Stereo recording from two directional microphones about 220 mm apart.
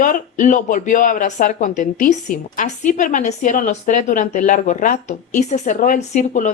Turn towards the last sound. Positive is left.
turn(degrees=35)  # may be behind; listen again after turning